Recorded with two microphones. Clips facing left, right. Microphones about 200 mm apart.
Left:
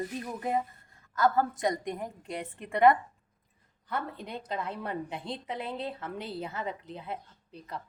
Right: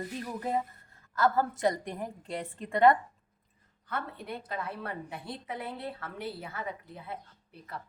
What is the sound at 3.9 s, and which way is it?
A woman's voice, 15° left (ahead or behind).